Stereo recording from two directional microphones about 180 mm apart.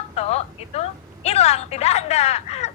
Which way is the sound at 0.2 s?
35° left (ahead or behind).